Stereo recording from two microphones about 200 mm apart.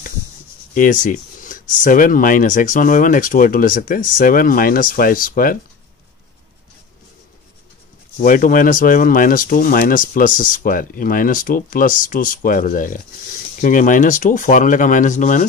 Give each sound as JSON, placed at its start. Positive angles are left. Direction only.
{"t": 0.7, "sound": "speech", "side_deg": 40}
{"t": 8.2, "sound": "speech", "side_deg": 45}